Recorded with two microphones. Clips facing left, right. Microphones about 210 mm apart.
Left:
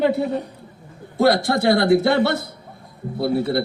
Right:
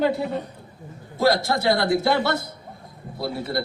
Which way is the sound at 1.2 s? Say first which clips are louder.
Left 4 dB; 60° left (ahead or behind).